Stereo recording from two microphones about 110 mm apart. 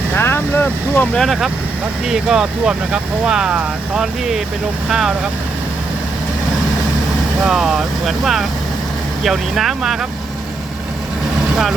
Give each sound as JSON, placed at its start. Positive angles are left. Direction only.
{"t": 0.2, "sound": "speech", "side_deg": 20}
{"t": 1.1, "sound": "speech", "side_deg": 0}
{"t": 7.4, "sound": "speech", "side_deg": -5}